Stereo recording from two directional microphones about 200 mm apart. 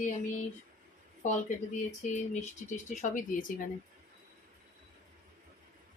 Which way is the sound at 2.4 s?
35° left (ahead or behind).